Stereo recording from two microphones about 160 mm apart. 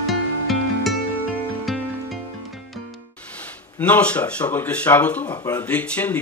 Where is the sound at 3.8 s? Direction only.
10° left (ahead or behind).